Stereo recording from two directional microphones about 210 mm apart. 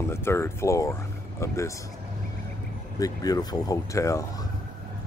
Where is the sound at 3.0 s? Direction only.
15° left (ahead or behind).